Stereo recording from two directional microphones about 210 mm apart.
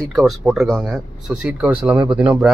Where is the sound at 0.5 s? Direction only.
Centre (ahead or behind).